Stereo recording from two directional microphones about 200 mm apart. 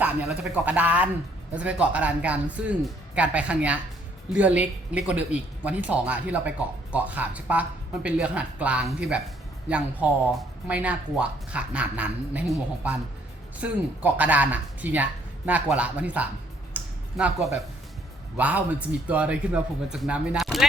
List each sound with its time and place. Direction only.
0.0 s a man's voice: 5° right (ahead or behind)
16.7 s a sound: 5° right (ahead or behind)
18.3 s a man's voice: 5° right (ahead or behind)